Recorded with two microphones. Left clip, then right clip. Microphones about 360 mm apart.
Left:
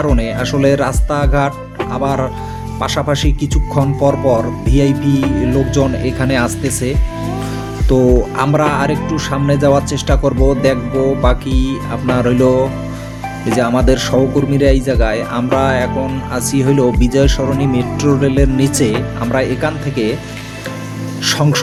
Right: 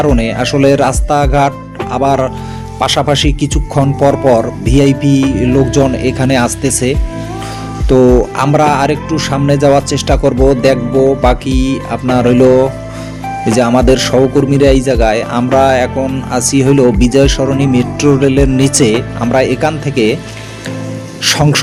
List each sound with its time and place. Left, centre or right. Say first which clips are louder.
0.0 s speech: right 5 dB; left
21.2 s speech: right 4 dB; left